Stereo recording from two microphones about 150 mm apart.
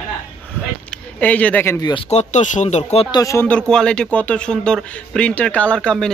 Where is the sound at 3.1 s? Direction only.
25° left (ahead or behind).